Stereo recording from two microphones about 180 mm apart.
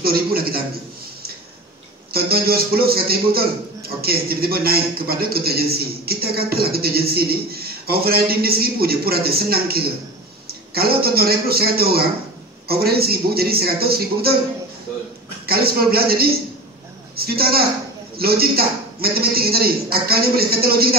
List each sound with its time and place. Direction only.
0.0 s a man's voice: 55° right (ahead or behind)
2.1 s a man's voice: 55° right (ahead or behind)
15.4 s a man's voice: 60° right (ahead or behind)